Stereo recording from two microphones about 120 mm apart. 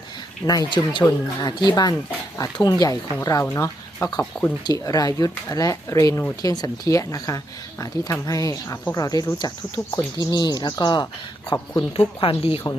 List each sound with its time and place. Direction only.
0.4 s speech: 35° left (ahead or behind)
11.9 s speech: 50° left (ahead or behind)